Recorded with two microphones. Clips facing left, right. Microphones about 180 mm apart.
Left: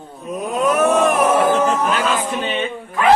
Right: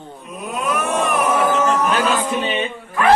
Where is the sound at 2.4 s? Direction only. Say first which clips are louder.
Even; 10° right (ahead or behind).